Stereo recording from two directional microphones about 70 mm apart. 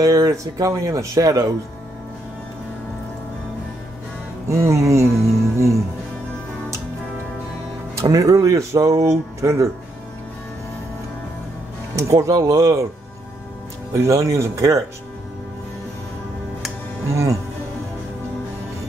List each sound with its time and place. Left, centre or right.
0.0 s speech: right
4.5 s speech: right
7.9 s speech: right
11.9 s speech: right
13.9 s speech: right
17.1 s speech: right